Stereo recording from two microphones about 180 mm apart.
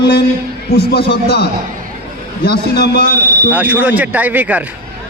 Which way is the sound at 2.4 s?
65° left (ahead or behind).